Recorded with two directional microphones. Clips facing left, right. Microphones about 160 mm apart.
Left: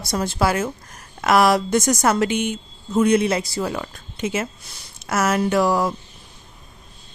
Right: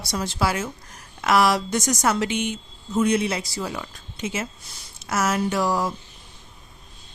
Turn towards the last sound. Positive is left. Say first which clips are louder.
# left 4 dB
turn(degrees=60)  # may be behind; listen again after turning